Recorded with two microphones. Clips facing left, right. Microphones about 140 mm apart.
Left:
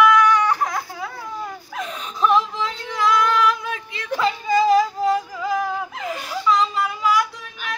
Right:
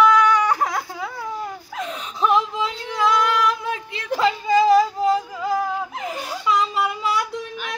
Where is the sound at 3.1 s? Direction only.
30° right (ahead or behind).